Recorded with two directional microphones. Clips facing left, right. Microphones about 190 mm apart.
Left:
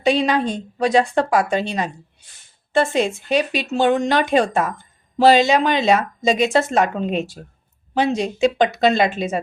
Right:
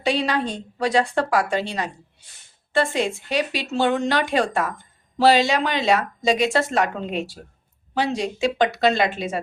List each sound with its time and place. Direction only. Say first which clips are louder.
0.0 s speech: left 4 dB; 20° left (ahead or behind)